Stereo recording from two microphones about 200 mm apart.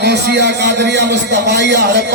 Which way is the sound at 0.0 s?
55° right (ahead or behind).